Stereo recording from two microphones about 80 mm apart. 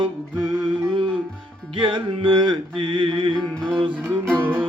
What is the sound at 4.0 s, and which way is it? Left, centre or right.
Music, right.